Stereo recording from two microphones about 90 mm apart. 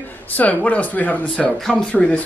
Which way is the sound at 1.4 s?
5° left (ahead or behind).